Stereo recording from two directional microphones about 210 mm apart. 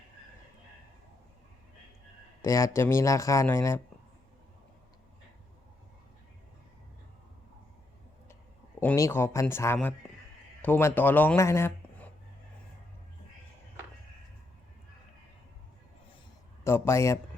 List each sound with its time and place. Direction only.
2.4 s speech: 15° left (ahead or behind)
8.8 s speech: 10° left (ahead or behind)
16.6 s speech: 10° left (ahead or behind)